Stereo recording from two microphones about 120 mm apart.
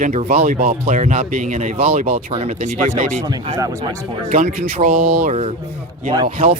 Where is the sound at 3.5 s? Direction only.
25° right (ahead or behind).